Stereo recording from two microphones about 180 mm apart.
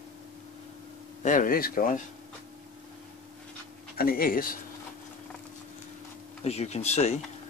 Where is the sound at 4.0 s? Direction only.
55° left (ahead or behind).